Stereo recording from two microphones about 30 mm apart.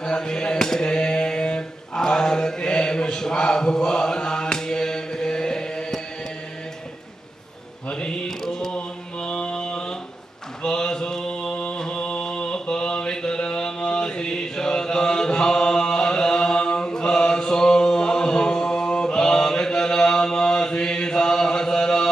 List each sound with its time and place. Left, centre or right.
0.0 s a sound: left
0.8 s mantra: left
7.9 s mantra: left
9.3 s mantra: left
9.6 s a sound: left
10.6 s mantra: left